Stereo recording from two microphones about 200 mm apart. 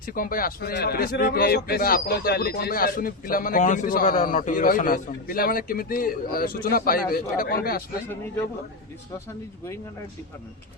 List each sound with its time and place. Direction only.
0.1 s a man's voice: 45° left (ahead or behind)
8.0 s speech: 10° left (ahead or behind)